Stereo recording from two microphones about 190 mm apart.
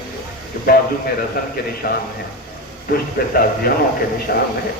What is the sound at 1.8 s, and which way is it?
Speech, 50° left (ahead or behind).